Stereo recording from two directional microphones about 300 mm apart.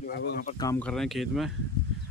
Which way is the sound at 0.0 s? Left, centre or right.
Left.